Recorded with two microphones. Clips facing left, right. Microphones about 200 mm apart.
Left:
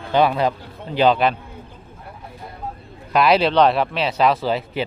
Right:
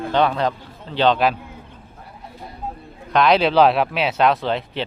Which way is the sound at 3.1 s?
5° left (ahead or behind).